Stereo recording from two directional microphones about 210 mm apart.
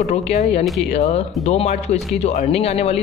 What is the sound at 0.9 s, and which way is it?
Speech, 30° left (ahead or behind).